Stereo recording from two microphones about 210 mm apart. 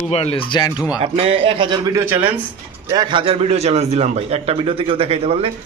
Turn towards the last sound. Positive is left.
turn(degrees=-30)  # may be behind; listen again after turning